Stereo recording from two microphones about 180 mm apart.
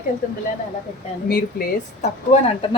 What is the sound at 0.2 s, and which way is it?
A woman's voice, 50° left (ahead or behind).